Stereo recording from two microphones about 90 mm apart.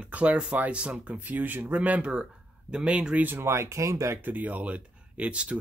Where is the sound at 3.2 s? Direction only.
25° right (ahead or behind).